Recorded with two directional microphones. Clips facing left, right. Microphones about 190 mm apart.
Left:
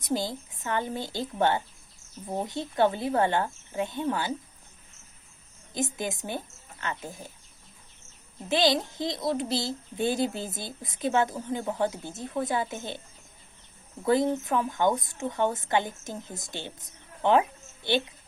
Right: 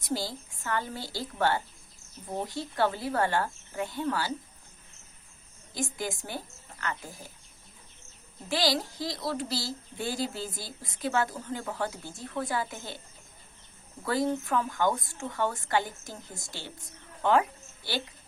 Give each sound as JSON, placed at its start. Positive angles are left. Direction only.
{"t": 0.0, "sound": "speech", "side_deg": 20}
{"t": 5.7, "sound": "speech", "side_deg": 20}
{"t": 8.4, "sound": "speech", "side_deg": 20}
{"t": 14.0, "sound": "speech", "side_deg": 20}
{"t": 17.2, "sound": "a sound", "side_deg": 20}